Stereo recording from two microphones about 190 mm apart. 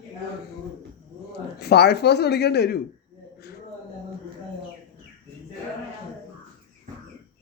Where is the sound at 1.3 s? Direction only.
60° left (ahead or behind).